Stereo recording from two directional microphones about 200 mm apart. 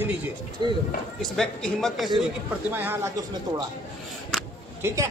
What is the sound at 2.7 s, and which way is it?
Speech, 10° right (ahead or behind).